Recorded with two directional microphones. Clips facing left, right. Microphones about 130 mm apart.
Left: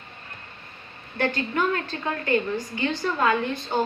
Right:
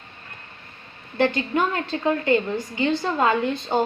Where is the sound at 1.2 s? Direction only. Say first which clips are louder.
Right 3 dB; 25° right (ahead or behind).